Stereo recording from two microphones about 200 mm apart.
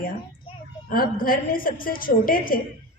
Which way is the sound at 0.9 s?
45° left (ahead or behind).